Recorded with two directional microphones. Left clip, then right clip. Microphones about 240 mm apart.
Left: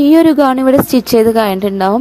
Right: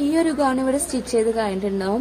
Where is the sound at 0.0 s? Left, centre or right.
Left.